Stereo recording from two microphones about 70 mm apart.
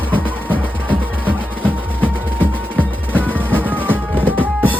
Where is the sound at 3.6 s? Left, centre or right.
Right.